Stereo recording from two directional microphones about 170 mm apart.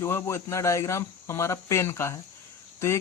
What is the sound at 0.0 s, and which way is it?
Cricket, 15° left (ahead or behind).